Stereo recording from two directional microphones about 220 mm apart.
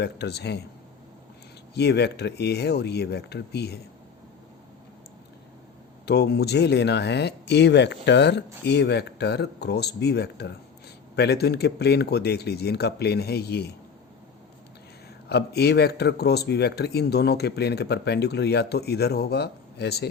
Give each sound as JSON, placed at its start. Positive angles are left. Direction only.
{"t": 0.0, "sound": "speech", "side_deg": 50}
{"t": 1.7, "sound": "speech", "side_deg": 50}
{"t": 6.1, "sound": "speech", "side_deg": 50}
{"t": 15.3, "sound": "speech", "side_deg": 45}